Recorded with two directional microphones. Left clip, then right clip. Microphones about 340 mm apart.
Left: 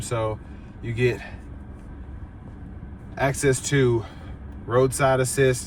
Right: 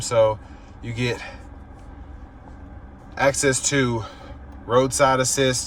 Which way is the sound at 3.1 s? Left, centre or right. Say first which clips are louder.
Right 3 dB; centre.